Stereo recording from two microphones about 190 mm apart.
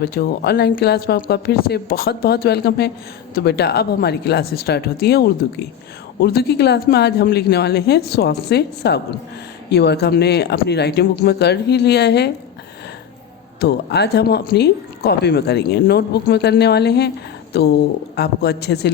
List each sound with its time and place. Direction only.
0.0 s speech: 55° left (ahead or behind)
13.6 s speech: 60° left (ahead or behind)